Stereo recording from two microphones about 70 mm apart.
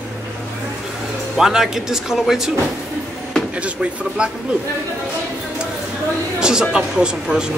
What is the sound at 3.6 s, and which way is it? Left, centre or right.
Speech, centre.